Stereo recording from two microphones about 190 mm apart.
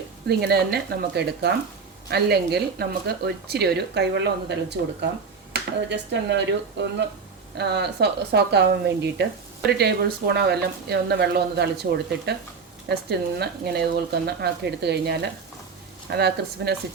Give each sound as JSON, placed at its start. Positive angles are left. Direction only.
{"t": 0.3, "sound": "speech", "side_deg": -55}